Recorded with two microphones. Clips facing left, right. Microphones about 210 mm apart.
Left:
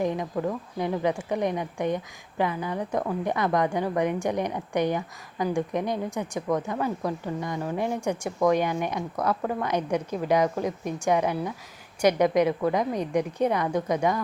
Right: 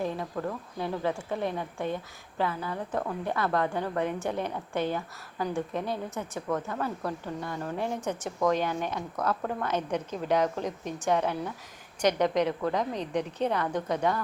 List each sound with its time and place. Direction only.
0.0 s a woman's voice: 15° left (ahead or behind)